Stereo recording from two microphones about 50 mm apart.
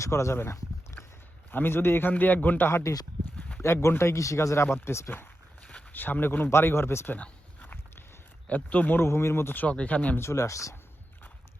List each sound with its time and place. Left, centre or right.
0.0 s speech: left
1.5 s a man's voice: left
2.9 s speech: left
3.6 s speech: left
5.9 s a man's voice: left
6.5 s speech: left
7.1 s a sound: left
8.4 s a man's voice: left
9.0 s speech: left
9.6 s speech: left
10.2 s speech: left